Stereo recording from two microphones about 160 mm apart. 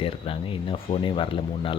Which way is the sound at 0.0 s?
35° left (ahead or behind).